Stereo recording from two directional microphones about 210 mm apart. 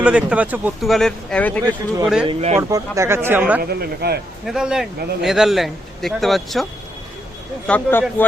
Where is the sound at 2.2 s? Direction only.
30° right (ahead or behind).